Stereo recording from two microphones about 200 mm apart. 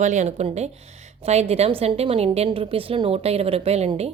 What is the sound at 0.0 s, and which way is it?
A woman's voice, 35° right (ahead or behind).